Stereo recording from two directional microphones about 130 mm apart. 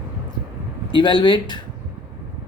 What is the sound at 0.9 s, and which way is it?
Speech, 40° left (ahead or behind).